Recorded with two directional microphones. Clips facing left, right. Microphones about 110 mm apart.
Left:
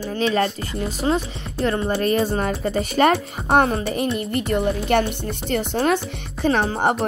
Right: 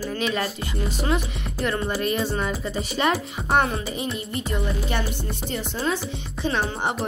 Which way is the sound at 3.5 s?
40° left (ahead or behind).